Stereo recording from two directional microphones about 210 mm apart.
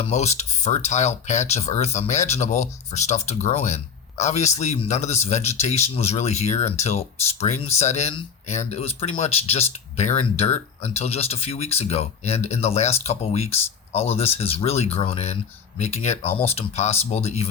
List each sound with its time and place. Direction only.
0.0 s a man's voice: 30° left (ahead or behind)